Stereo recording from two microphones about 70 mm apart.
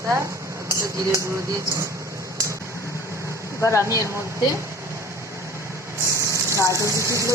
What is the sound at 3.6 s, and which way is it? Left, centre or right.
Speech, left.